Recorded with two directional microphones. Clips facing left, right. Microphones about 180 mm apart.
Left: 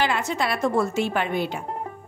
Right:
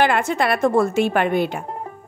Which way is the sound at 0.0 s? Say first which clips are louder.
Right 6 dB; 55° right (ahead or behind).